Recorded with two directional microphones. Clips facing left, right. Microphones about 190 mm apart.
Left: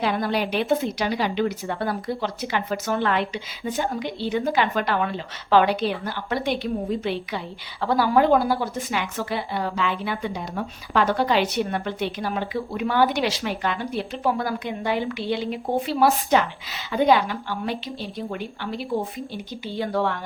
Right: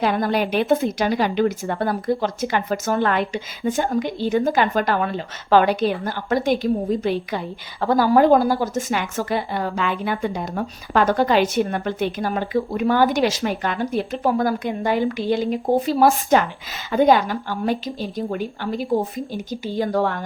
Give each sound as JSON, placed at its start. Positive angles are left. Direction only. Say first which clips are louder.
{"t": 0.0, "sound": "speech", "louder": "right 3 dB", "side_deg": -50}